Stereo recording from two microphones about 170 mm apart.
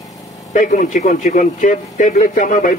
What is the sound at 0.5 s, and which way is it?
Speech, 50° left (ahead or behind).